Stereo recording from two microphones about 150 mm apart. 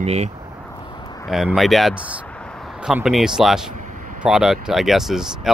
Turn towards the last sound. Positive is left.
turn(degrees=0)  # may be behind; listen again after turning